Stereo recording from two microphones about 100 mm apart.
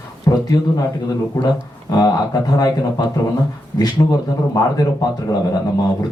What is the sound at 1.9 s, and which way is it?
Speech, 40° left (ahead or behind).